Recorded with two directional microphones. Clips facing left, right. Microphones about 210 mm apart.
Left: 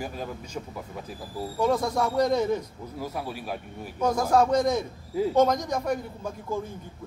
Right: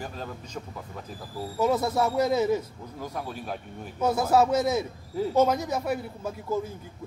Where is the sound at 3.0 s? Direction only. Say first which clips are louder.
Left 1 dB; 10° left (ahead or behind).